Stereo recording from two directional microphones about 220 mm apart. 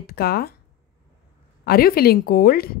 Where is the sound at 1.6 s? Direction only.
45° left (ahead or behind).